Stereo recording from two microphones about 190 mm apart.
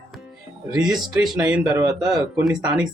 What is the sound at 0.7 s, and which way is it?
Speech, 20° right (ahead or behind).